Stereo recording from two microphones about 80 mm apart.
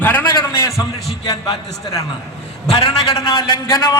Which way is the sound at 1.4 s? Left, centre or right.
Left.